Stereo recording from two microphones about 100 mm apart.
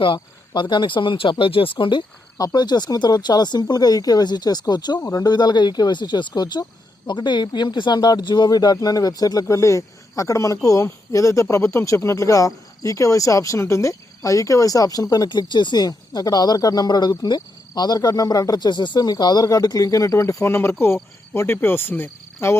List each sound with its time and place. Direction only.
0.0 s speech: 55° left (ahead or behind)
2.4 s speech: 45° left (ahead or behind); by 22.5 s 25° left (ahead or behind)